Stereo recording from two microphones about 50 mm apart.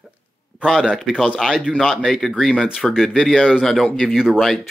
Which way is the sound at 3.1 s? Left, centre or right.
Centre.